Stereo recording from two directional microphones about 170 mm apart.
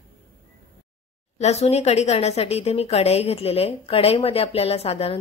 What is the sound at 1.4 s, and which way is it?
A woman's voice, 40° left (ahead or behind).